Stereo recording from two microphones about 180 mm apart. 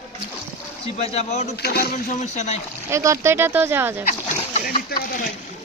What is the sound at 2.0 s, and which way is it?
Speech, 40° left (ahead or behind).